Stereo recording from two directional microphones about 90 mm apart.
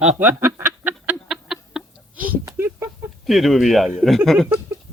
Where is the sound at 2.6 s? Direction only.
30° right (ahead or behind).